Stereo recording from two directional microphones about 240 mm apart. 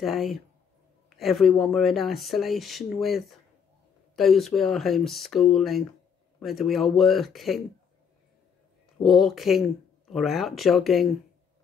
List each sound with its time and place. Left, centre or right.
0.0 s speech: centre
9.0 s speech: centre